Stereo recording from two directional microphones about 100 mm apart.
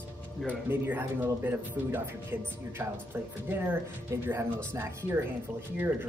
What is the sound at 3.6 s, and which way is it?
Speech, 20° right (ahead or behind).